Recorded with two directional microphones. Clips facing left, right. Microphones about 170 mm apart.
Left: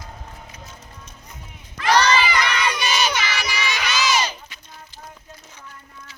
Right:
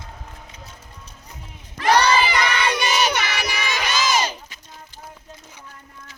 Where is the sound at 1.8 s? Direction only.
50° right (ahead or behind).